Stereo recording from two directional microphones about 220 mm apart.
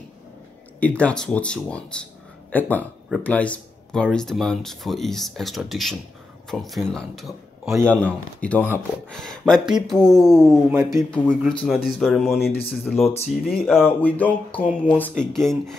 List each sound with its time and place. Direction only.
0.7 s speech: 5° left (ahead or behind)
10.7 s a man's voice: 10° right (ahead or behind)
11.1 s speech: 5° left (ahead or behind)
13.0 s speech: 30° left (ahead or behind)
13.5 s speech: centre (ahead or behind)